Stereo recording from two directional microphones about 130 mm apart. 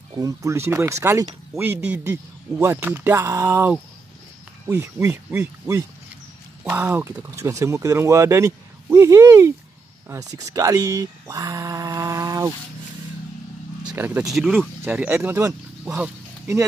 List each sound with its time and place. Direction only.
0.1 s speech: 25° right (ahead or behind)
6.6 s speech: 15° right (ahead or behind)
13.9 s speech: 15° right (ahead or behind)
14.3 s speech: centre (ahead or behind)
15.3 s speech: 25° right (ahead or behind)